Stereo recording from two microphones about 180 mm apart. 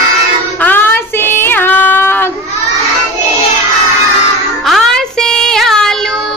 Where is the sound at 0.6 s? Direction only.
10° left (ahead or behind).